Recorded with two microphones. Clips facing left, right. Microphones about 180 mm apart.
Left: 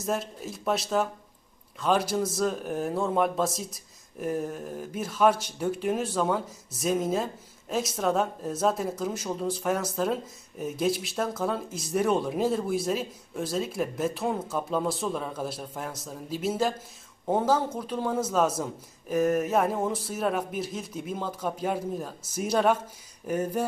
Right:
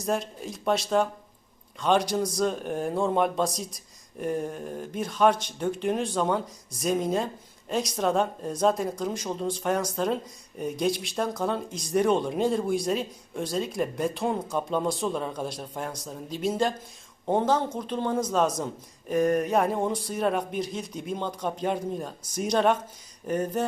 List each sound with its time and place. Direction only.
0.0 s speech: 5° left (ahead or behind)